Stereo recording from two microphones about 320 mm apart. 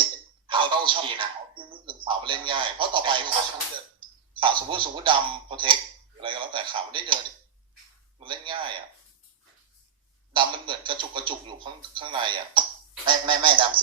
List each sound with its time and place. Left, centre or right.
0.4 s a sound: centre
4.4 s speech: centre
8.2 s speech: centre
10.3 s speech: centre